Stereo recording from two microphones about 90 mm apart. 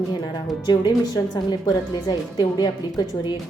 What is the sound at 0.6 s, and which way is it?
A woman's voice, 50° left (ahead or behind).